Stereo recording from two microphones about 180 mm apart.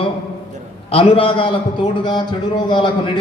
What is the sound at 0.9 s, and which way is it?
Speech, 30° left (ahead or behind).